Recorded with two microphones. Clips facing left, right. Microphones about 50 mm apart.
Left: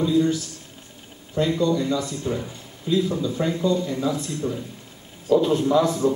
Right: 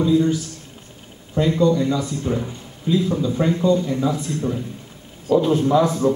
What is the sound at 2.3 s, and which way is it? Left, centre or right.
Speech, right.